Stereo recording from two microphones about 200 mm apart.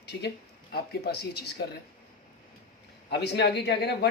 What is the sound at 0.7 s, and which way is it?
Speech, 55° left (ahead or behind).